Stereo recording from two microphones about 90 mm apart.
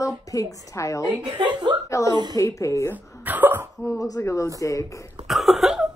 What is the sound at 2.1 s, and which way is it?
Speech, 50° right (ahead or behind).